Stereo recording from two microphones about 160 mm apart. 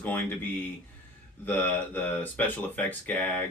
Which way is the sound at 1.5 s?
10° left (ahead or behind).